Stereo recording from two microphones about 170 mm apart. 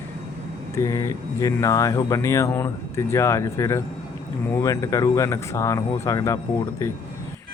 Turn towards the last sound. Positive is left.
turn(degrees=15)  # may be behind; listen again after turning